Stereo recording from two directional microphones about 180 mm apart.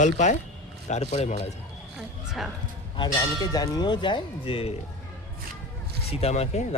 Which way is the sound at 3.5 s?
20° left (ahead or behind).